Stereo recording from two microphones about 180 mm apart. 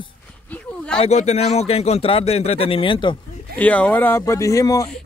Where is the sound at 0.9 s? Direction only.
40° left (ahead or behind).